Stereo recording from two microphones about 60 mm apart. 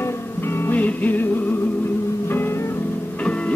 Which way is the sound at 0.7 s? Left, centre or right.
Left.